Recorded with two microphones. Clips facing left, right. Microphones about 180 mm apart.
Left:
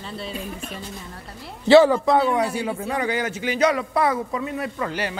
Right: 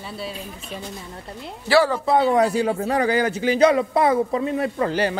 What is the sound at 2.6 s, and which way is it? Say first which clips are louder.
A man's voice: right 4 dB; 45° right (ahead or behind).